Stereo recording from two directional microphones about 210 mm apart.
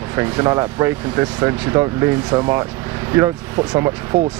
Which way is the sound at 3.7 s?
15° right (ahead or behind).